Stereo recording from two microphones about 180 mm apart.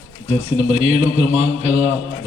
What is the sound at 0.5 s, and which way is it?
A man's voice, 35° right (ahead or behind).